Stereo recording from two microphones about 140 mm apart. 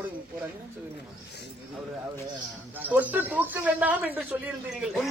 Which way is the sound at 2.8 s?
10° right (ahead or behind).